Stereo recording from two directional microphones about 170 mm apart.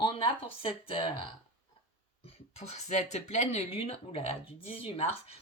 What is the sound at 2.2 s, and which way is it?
Speech, 40° left (ahead or behind).